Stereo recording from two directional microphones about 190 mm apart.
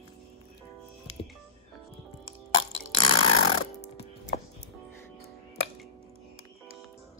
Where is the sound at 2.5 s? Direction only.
90° left.